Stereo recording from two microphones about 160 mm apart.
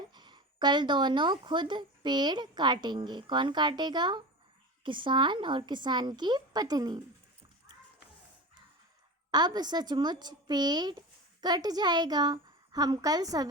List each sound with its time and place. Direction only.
0.1 s a woman's voice: 25° right (ahead or behind)
9.3 s a woman's voice: 25° right (ahead or behind)